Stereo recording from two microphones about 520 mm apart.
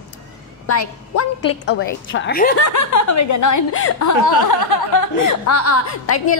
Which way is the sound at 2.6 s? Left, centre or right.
Left.